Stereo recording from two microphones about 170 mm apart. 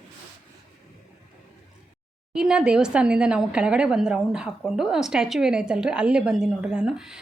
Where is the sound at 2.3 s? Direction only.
5° right (ahead or behind).